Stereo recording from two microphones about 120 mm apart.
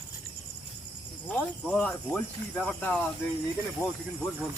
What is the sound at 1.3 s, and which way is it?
Speech, 10° left (ahead or behind).